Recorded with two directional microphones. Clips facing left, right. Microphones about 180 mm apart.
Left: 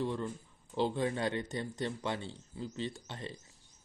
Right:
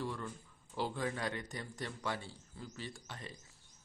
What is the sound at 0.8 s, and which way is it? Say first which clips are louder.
Speech: left 6 dB; 25° left (ahead or behind).